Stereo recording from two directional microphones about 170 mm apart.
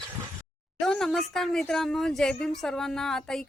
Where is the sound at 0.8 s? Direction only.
5° left (ahead or behind).